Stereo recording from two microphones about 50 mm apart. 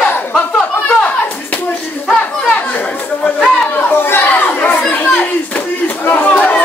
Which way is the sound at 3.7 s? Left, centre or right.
Left.